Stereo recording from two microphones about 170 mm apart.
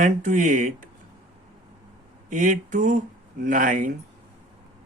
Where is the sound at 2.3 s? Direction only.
50° right (ahead or behind).